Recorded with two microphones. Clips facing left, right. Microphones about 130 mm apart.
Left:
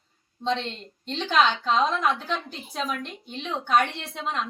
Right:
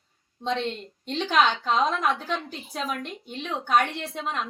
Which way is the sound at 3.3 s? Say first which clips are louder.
Even; 5° right (ahead or behind).